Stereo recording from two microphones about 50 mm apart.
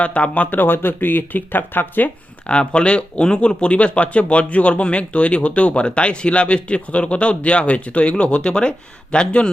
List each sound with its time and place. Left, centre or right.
0.0 s speech: left
2.5 s speech: left